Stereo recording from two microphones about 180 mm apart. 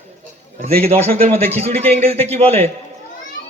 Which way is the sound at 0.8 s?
35° right (ahead or behind).